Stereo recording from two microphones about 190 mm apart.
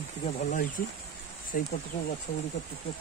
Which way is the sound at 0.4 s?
45° left (ahead or behind).